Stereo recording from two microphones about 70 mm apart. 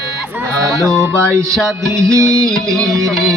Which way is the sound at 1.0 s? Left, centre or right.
Right.